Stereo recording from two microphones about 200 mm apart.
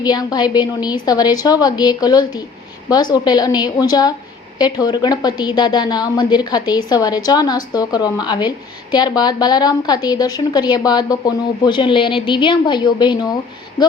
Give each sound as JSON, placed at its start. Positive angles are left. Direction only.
{"t": 0.0, "sound": "a woman's voice", "side_deg": 20}